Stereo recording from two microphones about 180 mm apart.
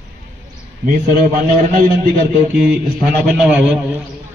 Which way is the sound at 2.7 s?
5° right (ahead or behind).